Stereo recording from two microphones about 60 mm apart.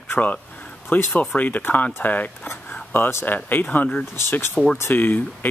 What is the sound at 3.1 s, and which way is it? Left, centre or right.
Speech, left.